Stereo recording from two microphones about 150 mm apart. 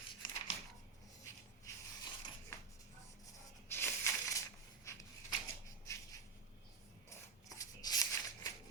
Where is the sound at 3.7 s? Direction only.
20° left (ahead or behind).